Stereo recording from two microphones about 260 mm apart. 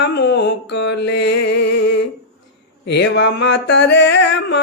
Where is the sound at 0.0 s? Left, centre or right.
Left.